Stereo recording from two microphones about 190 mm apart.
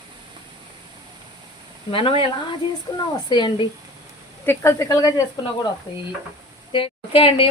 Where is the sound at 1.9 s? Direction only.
25° left (ahead or behind).